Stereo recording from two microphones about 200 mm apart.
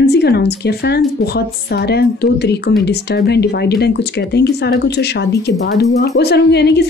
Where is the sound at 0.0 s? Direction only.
55° left (ahead or behind).